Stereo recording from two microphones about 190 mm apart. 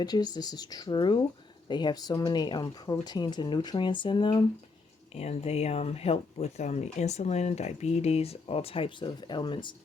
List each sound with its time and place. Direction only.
0.0 s speech: 20° left (ahead or behind)